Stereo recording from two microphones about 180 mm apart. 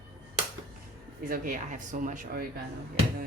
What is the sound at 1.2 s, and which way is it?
Speech, 50° right (ahead or behind).